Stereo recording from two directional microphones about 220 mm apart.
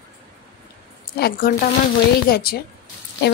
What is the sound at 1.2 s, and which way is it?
A woman's voice, 40° left (ahead or behind).